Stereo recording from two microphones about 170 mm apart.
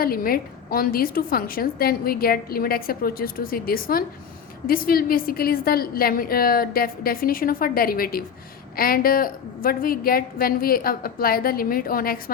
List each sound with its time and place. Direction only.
0.0 s a woman's voice: 60° left (ahead or behind)